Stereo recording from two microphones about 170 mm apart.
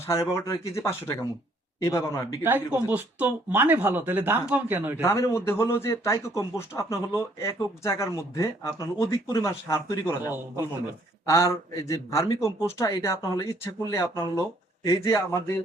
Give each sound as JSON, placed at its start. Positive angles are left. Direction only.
{"t": 0.1, "sound": "a man's voice", "side_deg": 20}
{"t": 2.4, "sound": "speech", "side_deg": -10}
{"t": 5.0, "sound": "a man's voice", "side_deg": 20}